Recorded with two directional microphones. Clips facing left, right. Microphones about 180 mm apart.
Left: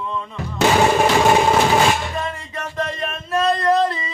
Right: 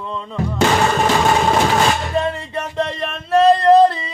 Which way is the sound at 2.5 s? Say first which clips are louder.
Right 1 dB; 30° right (ahead or behind).